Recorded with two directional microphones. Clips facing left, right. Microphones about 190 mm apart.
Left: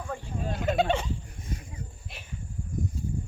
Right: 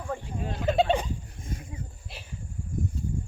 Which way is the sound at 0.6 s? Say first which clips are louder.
Right 2 dB; 30° right (ahead or behind).